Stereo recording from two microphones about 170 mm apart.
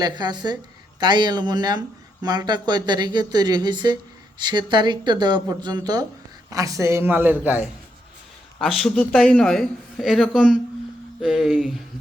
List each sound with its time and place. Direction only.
0.0 s a man's voice: 25° right (ahead or behind); by 7.6 s 10° right (ahead or behind)
8.5 s a man's voice: centre (ahead or behind)